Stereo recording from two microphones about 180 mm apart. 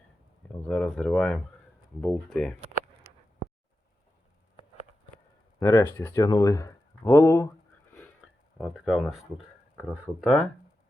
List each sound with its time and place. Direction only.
0.7 s speech: centre (ahead or behind)
5.5 s speech: 15° left (ahead or behind)
8.5 s speech: centre (ahead or behind)